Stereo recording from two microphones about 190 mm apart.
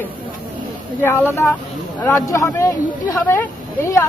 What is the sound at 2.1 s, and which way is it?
Speech, 15° left (ahead or behind).